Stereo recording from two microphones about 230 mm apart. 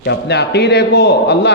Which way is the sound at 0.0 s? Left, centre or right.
Left.